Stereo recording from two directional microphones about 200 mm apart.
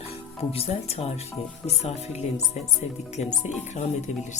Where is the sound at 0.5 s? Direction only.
30° left (ahead or behind).